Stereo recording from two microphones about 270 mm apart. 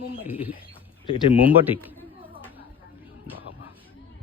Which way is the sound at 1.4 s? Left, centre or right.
Centre.